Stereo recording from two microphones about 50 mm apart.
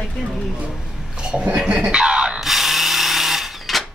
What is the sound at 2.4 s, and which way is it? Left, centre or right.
Tools, centre.